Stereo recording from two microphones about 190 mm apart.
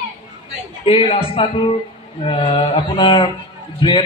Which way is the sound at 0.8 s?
30° left (ahead or behind).